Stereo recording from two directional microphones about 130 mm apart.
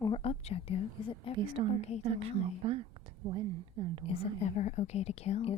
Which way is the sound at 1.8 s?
55° left (ahead or behind).